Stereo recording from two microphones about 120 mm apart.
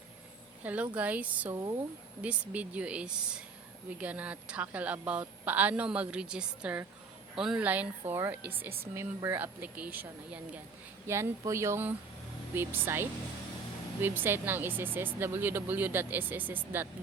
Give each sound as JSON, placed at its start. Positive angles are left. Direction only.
{"t": 0.6, "sound": "speech", "side_deg": -15}
{"t": 1.5, "sound": "speech", "side_deg": -30}
{"t": 2.2, "sound": "speech", "side_deg": -10}